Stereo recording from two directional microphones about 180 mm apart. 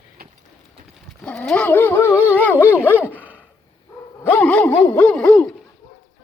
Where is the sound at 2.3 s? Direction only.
10° left (ahead or behind).